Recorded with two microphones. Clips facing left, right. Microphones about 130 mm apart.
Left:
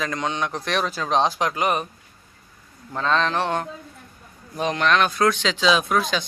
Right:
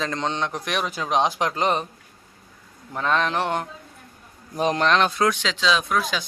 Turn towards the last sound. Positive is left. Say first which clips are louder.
# left 2 dB
turn(degrees=-5)  # may be behind; listen again after turning